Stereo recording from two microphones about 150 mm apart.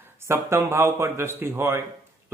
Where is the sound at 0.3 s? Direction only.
20° right (ahead or behind).